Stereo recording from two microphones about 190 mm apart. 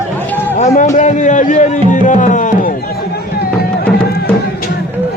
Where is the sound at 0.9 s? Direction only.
40° left (ahead or behind).